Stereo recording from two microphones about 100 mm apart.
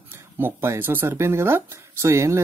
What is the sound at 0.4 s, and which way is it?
Speech, 25° right (ahead or behind).